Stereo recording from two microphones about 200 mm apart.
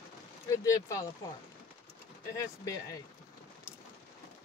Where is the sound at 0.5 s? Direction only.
15° left (ahead or behind).